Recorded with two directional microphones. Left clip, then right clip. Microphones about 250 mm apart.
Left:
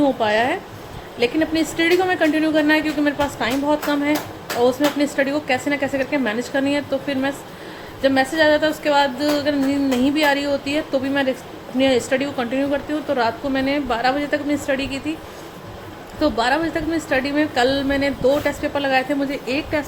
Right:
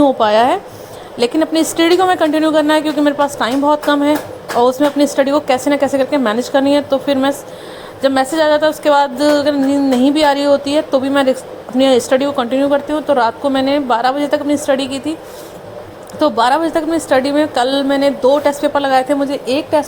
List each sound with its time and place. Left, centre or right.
0.0 s a woman's voice: right
16.2 s a woman's voice: centre